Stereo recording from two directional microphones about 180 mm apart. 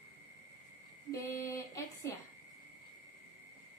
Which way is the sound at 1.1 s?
15° left (ahead or behind).